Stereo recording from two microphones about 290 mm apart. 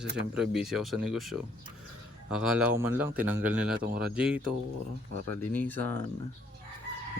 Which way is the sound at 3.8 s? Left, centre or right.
Right.